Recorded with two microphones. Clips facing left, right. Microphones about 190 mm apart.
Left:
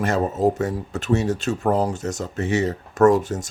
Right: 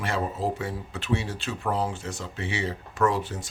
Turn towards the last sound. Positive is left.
turn(degrees=45)  # may be behind; listen again after turning